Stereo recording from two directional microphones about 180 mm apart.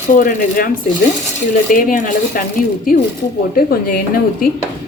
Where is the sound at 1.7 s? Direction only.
50° left (ahead or behind).